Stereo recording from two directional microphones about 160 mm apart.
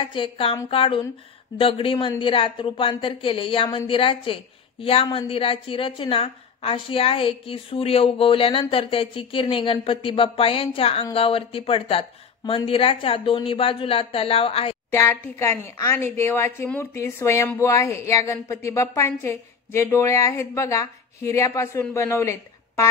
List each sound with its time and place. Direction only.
0.0 s speech: 30° left (ahead or behind)
14.9 s speech: 15° left (ahead or behind)